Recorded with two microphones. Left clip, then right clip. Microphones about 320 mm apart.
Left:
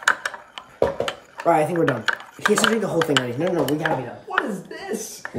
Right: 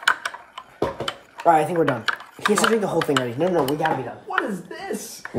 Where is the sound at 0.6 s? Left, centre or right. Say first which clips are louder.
Left 6 dB; centre.